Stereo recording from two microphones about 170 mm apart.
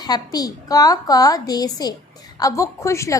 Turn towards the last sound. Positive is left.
turn(degrees=15)  # may be behind; listen again after turning